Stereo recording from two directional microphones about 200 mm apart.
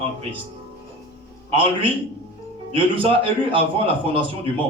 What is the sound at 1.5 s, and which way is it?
Speech, 30° right (ahead or behind).